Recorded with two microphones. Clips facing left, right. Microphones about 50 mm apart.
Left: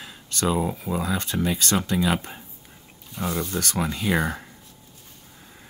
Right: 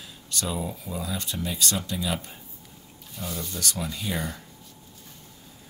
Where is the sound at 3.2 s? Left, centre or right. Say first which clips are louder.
Left 7 dB; left.